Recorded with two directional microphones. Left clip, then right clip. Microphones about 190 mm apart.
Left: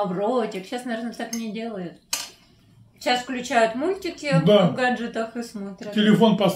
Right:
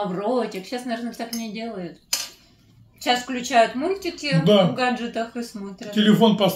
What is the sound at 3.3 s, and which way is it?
Speech, 20° left (ahead or behind).